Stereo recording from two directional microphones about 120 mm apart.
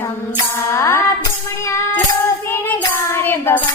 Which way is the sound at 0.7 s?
25° left (ahead or behind).